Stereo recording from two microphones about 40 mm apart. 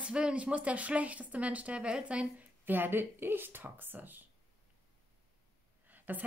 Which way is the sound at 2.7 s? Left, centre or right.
Right.